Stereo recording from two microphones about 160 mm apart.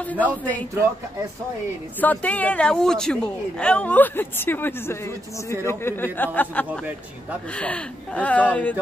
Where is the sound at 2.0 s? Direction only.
10° left (ahead or behind).